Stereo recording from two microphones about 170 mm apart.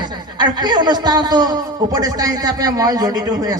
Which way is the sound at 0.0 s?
25° right (ahead or behind).